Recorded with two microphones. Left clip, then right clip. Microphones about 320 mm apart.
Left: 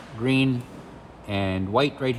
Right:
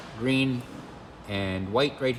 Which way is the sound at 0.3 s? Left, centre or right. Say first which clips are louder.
Left 3 dB; centre.